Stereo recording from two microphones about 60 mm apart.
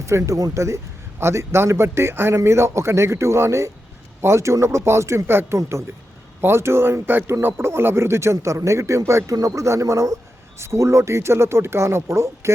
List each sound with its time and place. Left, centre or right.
0.0 s speech: right
0.5 s speech: right
5.5 s speech: right